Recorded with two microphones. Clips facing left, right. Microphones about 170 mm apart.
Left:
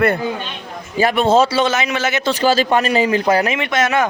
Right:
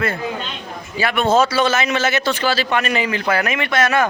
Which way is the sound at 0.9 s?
35° left (ahead or behind).